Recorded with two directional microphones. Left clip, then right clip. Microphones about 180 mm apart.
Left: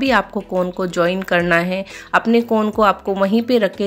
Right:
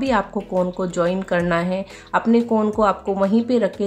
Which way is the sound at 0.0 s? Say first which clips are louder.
Left 4 dB; 15° left (ahead or behind).